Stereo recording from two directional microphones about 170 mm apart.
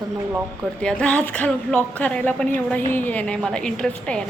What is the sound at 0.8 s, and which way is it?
A woman's voice, 5° left (ahead or behind).